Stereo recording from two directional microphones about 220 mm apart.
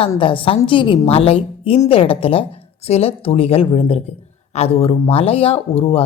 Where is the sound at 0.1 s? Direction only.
25° left (ahead or behind).